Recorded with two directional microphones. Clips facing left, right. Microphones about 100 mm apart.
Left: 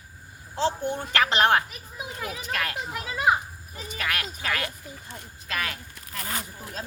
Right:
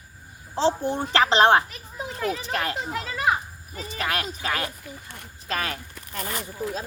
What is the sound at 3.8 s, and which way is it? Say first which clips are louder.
A woman's voice: right 3 dB; 30° right (ahead or behind).